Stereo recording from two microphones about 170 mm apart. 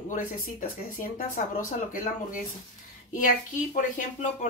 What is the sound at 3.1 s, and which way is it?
Speech, 55° left (ahead or behind).